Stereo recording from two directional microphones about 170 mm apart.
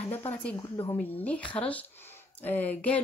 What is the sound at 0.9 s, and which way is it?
Speech, 10° left (ahead or behind).